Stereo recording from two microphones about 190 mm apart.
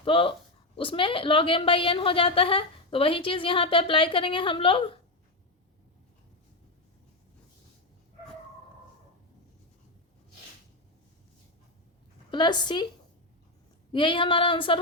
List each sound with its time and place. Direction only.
0.0 s a woman's voice: 25° left (ahead or behind)
12.3 s a woman's voice: 25° left (ahead or behind)
13.9 s a woman's voice: 25° left (ahead or behind)